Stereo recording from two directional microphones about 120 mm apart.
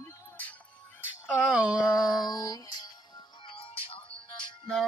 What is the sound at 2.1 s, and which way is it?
Music, 35° left (ahead or behind).